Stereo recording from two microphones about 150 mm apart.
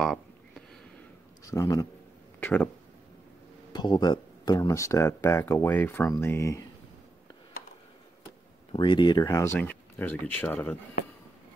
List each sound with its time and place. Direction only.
0.0 s a sound: 5° left (ahead or behind)
1.4 s a man's voice: 20° left (ahead or behind)
2.4 s speech: 10° left (ahead or behind)
3.7 s speech: 30° left (ahead or behind)
8.7 s speech: 30° left (ahead or behind)
9.4 s speech: 15° left (ahead or behind)